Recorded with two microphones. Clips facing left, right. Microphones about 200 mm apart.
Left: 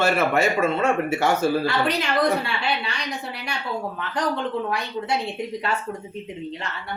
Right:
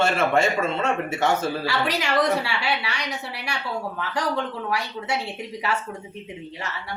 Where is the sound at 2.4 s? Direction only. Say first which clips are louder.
Even; 75° right (ahead or behind).